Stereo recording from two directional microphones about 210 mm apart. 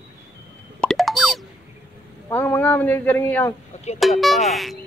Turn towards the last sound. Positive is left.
turn(degrees=0)  # may be behind; listen again after turning